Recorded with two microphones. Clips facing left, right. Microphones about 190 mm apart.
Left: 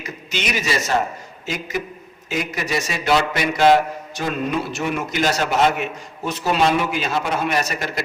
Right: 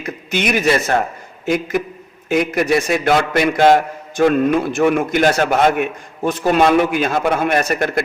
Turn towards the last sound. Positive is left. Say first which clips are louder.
# right 6 dB
turn(degrees=-55)  # may be behind; listen again after turning